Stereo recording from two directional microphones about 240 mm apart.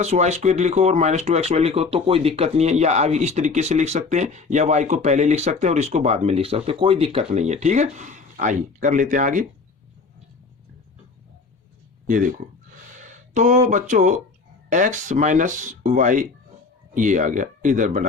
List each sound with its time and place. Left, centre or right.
0.0 s speech: right
12.0 s speech: right